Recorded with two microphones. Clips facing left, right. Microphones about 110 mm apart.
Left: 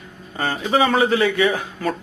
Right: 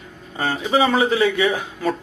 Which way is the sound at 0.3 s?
5° right (ahead or behind).